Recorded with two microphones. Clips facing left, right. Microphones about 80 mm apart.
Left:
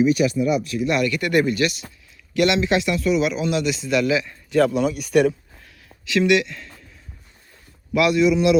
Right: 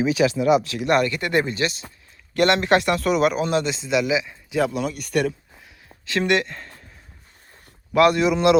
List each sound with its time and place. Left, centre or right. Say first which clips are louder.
0.3 s speech: right 2 dB; right
1.0 s speech: left 3 dB; right
2.3 s speech: right 1 dB; right; by 4.7 s centre
4.7 s speech: left 5 dB; centre
6.1 s speech: left 3 dB; right
7.9 s speech: right 2 dB; right
8.2 s a man's voice: left 1 dB; right